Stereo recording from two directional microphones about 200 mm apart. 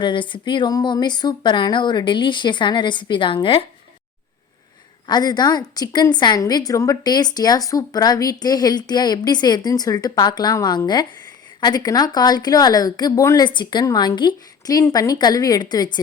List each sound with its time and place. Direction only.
0.0 s a woman's voice: 25° left (ahead or behind)
5.0 s a woman's voice: 20° left (ahead or behind)